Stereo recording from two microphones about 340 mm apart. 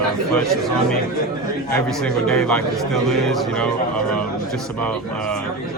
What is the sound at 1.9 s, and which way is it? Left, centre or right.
A man's voice, centre.